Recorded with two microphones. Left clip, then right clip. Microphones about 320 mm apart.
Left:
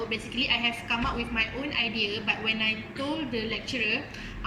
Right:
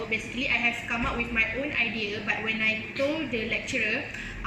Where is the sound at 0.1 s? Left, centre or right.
Centre.